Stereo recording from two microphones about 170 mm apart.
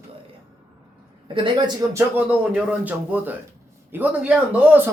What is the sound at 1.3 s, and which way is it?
Speech, 25° right (ahead or behind).